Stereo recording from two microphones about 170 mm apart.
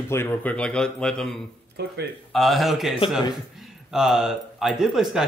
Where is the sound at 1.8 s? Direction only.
75° right (ahead or behind).